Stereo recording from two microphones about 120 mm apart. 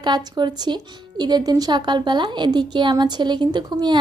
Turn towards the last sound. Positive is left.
turn(degrees=-35)  # may be behind; listen again after turning